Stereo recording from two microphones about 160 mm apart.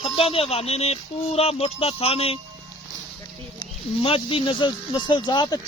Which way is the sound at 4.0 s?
35° left (ahead or behind).